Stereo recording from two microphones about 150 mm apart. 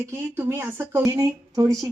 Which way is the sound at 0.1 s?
15° right (ahead or behind).